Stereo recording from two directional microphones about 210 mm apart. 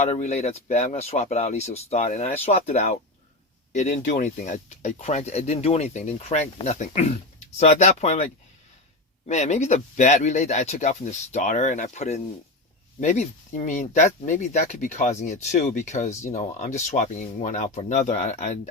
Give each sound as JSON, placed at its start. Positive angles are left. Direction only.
{"t": 0.0, "sound": "speech", "side_deg": 30}